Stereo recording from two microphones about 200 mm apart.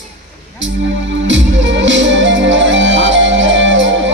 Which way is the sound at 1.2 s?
70° right (ahead or behind).